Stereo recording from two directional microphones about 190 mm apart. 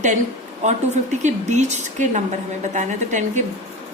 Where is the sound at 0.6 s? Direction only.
40° right (ahead or behind).